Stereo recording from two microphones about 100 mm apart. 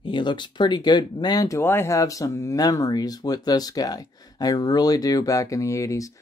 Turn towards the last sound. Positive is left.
turn(degrees=30)  # may be behind; listen again after turning